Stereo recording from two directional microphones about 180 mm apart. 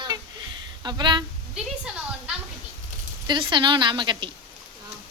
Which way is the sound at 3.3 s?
25° right (ahead or behind).